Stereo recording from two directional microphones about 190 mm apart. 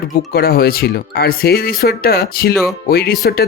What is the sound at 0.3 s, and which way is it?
Speech, 55° left (ahead or behind).